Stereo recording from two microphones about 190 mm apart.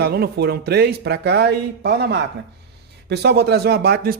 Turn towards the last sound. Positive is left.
turn(degrees=-55)  # may be behind; listen again after turning